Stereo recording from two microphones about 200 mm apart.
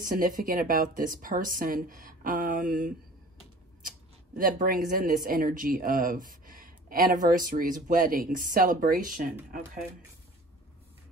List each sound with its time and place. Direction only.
0.0 s speech: 45° right (ahead or behind)